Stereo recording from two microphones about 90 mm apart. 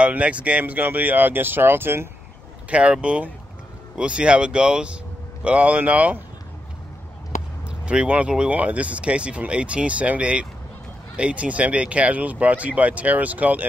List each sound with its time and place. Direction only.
0.0 s speech: 15° right (ahead or behind)
2.7 s speech: 10° right (ahead or behind)
7.8 s speech: 10° right (ahead or behind)